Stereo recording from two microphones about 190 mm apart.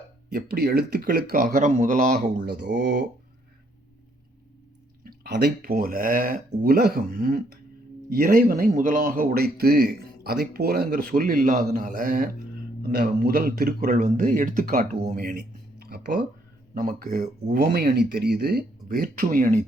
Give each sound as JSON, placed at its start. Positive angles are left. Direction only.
{"t": 0.3, "sound": "speech", "side_deg": -55}
{"t": 2.5, "sound": "speech", "side_deg": -65}
{"t": 5.0, "sound": "speech", "side_deg": -60}